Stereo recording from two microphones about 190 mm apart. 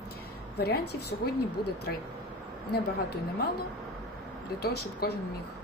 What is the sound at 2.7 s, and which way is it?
Speech, 55° left (ahead or behind).